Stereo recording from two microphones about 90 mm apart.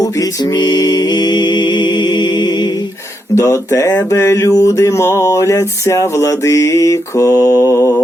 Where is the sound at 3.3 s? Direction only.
35° left (ahead or behind).